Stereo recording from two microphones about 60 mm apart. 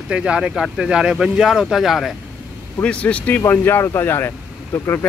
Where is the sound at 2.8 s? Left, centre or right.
Left.